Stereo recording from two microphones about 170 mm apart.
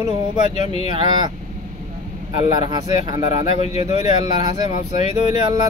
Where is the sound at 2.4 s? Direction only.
25° right (ahead or behind).